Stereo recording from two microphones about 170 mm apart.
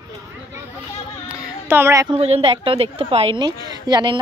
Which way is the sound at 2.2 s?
35° right (ahead or behind).